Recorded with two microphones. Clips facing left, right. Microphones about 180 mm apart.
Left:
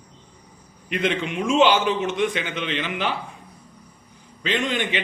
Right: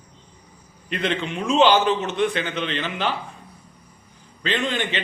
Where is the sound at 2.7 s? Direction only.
35° right (ahead or behind).